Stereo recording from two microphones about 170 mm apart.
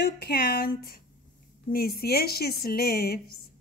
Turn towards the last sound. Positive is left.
turn(degrees=65)  # may be behind; listen again after turning